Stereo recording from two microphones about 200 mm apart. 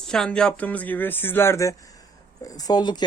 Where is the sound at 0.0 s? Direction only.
5° left (ahead or behind).